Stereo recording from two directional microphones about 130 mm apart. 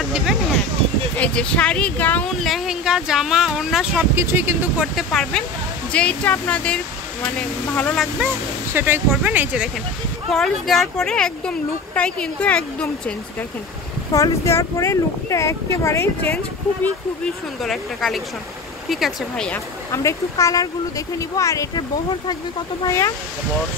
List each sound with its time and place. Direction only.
1.1 s speech: 10° left (ahead or behind)
2.4 s speech: centre (ahead or behind)
4.1 s speech: 20° right (ahead or behind)
4.9 s speech: 5° left (ahead or behind)
8.7 s speech: 15° right (ahead or behind)
10.3 s speech: 5° left (ahead or behind)
14.1 s speech: 25° left (ahead or behind)
16.8 s speech: 5° left (ahead or behind)
19.9 s speech: 25° left (ahead or behind)
22.8 s speech: 25° left (ahead or behind)